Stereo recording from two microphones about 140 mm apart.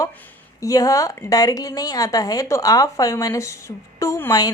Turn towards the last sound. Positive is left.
turn(degrees=25)  # may be behind; listen again after turning